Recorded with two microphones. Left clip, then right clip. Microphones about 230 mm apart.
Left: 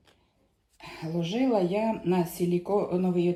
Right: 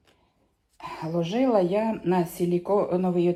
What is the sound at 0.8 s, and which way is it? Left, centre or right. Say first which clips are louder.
Speech: right 5 dB; right.